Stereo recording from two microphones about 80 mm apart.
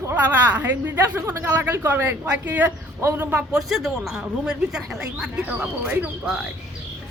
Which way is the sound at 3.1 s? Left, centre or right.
Centre.